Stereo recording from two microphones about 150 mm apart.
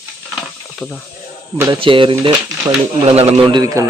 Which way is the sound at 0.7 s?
Centre (ahead or behind).